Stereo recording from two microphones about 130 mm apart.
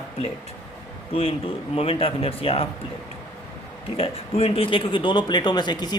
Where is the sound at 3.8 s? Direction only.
50° left (ahead or behind).